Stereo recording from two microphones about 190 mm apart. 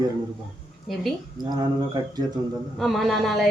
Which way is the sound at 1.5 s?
20° right (ahead or behind).